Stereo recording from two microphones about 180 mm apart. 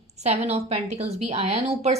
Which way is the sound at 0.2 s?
40° right (ahead or behind).